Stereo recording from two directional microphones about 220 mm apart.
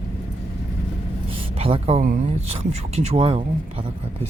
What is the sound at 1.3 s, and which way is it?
Speech, 25° right (ahead or behind).